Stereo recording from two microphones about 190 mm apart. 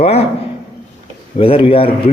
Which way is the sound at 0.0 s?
30° left (ahead or behind).